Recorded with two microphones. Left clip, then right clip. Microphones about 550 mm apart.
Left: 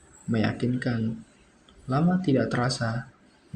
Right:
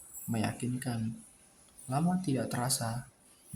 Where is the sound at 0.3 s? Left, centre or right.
Right.